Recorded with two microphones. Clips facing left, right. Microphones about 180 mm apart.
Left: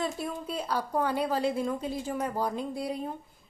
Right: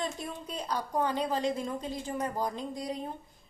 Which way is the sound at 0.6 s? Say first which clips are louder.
Left 1 dB; 15° right (ahead or behind).